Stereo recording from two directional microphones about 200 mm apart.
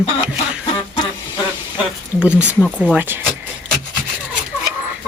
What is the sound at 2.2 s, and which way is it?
Speech, 10° left (ahead or behind).